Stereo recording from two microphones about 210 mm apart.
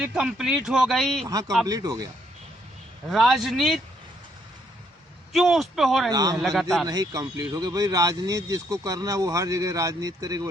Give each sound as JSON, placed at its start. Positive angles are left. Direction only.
{"t": 0.0, "sound": "a man's voice", "side_deg": 0}
{"t": 1.3, "sound": "speech", "side_deg": -20}
{"t": 3.1, "sound": "a man's voice", "side_deg": 0}
{"t": 5.3, "sound": "a man's voice", "side_deg": 0}
{"t": 6.1, "sound": "speech", "side_deg": -20}
{"t": 6.3, "sound": "a man's voice", "side_deg": 0}
{"t": 6.8, "sound": "speech", "side_deg": -15}